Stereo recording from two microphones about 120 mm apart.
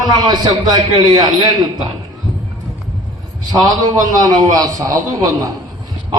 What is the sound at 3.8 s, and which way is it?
A man's voice, 30° right (ahead or behind).